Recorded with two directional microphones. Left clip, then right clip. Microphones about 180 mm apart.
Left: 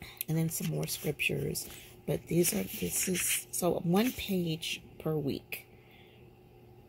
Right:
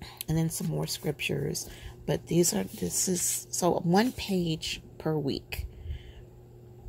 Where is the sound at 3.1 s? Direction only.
20° right (ahead or behind).